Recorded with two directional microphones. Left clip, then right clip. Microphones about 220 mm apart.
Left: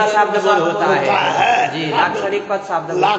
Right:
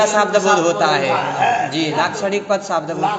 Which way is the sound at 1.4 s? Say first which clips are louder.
Left 1 dB; 45° left (ahead or behind).